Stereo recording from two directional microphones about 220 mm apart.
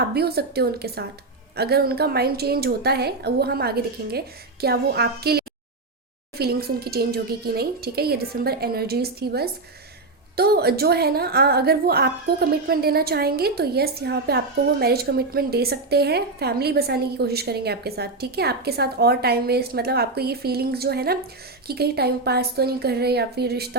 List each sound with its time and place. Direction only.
0.0 s a woman's voice: 45° right (ahead or behind)